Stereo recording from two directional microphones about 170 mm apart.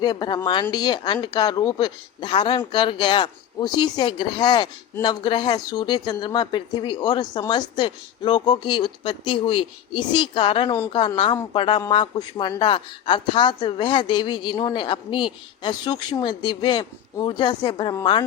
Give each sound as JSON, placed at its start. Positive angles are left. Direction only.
{"t": 0.0, "sound": "speech", "side_deg": 25}